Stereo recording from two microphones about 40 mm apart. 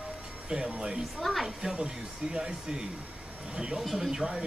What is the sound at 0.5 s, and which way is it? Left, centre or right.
Speech, centre.